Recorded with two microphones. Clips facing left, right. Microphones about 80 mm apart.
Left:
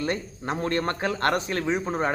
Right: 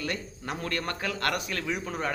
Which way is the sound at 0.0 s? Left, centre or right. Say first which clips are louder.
Left 5 dB; left.